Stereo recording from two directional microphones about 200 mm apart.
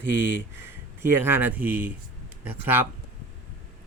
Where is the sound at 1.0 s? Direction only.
10° right (ahead or behind).